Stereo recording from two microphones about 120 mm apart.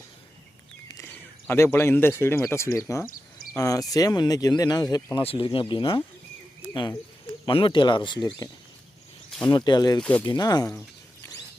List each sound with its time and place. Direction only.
1.1 s speech: 20° left (ahead or behind)
5.1 s speech: 50° left (ahead or behind)
7.4 s speech: 45° left (ahead or behind)
9.5 s speech: 35° left (ahead or behind)
10.0 s speech: 10° left (ahead or behind)
10.2 s speech: 35° left (ahead or behind)